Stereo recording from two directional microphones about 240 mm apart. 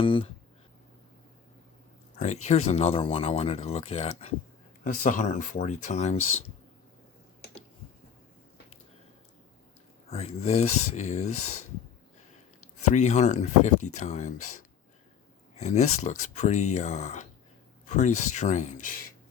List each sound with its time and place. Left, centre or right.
0.0 s speech: left
2.1 s speech: left
6.1 s speech: left
10.1 s speech: left
11.3 s speech: left
12.9 s speech: left
14.3 s speech: left
15.5 s speech: left